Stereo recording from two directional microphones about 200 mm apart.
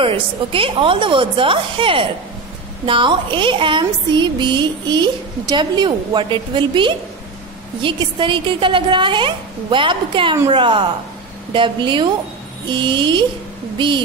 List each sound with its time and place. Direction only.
0.0 s a woman's voice: 25° right (ahead or behind)